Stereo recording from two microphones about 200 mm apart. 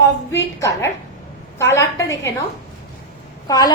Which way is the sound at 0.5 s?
15° left (ahead or behind).